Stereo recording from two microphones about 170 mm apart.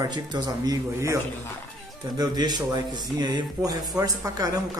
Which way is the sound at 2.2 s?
25° right (ahead or behind).